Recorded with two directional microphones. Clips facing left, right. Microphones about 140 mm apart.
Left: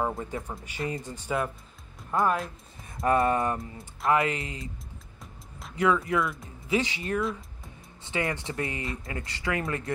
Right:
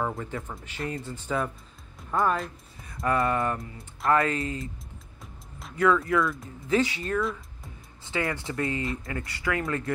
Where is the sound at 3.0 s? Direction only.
20° left (ahead or behind).